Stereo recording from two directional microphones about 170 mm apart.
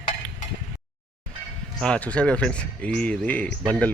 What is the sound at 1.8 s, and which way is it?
Speech, 5° left (ahead or behind).